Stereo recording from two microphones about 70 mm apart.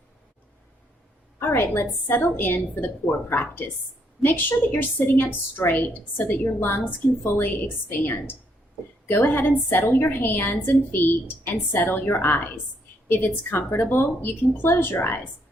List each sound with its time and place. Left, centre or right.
1.4 s a woman's voice: left
13.1 s a woman's voice: left